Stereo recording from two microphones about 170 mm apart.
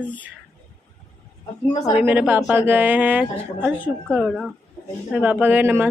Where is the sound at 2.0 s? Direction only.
10° right (ahead or behind).